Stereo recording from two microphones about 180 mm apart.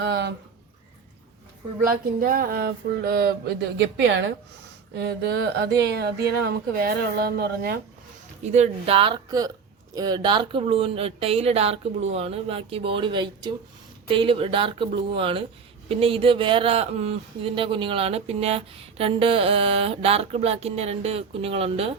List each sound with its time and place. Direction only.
0.0 s speech: 70° right (ahead or behind)
1.9 s speech: 55° right (ahead or behind)
3.8 s a woman's voice: 85° right
5.2 s speech: 65° right (ahead or behind)
8.5 s speech: 35° right (ahead or behind)